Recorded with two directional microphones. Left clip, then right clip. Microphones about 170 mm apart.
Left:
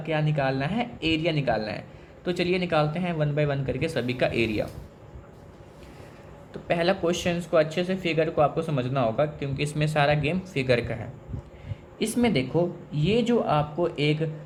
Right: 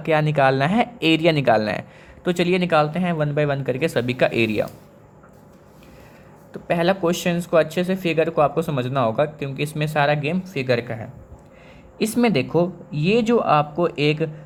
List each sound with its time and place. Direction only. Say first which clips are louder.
0.0 s speech: right 9 dB; 50° right (ahead or behind)
6.5 s speech: right 4 dB; 35° right (ahead or behind)
11.9 s speech: right 5 dB; 40° right (ahead or behind)